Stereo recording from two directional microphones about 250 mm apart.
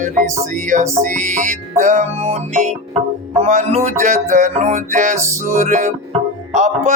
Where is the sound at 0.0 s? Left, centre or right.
Right.